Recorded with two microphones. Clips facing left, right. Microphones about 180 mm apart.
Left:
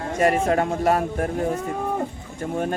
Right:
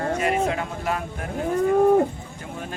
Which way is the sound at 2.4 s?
50° left (ahead or behind).